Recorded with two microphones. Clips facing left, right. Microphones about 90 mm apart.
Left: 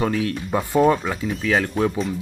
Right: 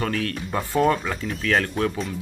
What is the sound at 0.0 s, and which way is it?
Speech, 10° left (ahead or behind).